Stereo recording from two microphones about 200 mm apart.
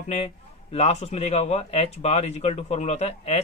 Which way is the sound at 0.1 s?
30° left (ahead or behind).